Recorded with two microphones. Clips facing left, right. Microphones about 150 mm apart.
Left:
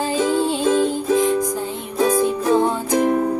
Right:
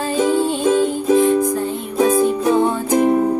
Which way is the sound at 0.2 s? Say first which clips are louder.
Right 3 dB; 15° right (ahead or behind).